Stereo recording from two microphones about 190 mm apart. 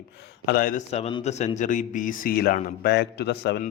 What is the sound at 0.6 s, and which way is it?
Speech, 40° left (ahead or behind).